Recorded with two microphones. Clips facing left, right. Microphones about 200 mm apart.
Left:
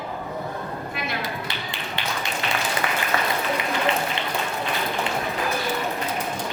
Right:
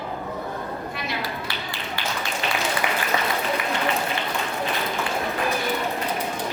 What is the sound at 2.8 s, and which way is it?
Applause, 15° right (ahead or behind).